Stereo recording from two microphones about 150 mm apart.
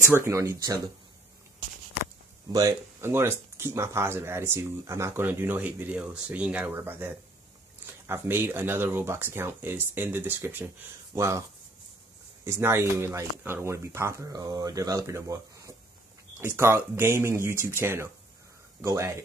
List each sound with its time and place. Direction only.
0.1 s speech: 20° right (ahead or behind)
2.5 s speech: 20° right (ahead or behind)
12.4 s speech: 15° right (ahead or behind)